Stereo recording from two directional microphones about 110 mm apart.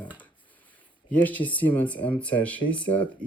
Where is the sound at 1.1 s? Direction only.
15° left (ahead or behind).